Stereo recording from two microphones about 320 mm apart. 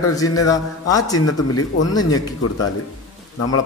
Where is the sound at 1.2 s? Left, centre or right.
Left.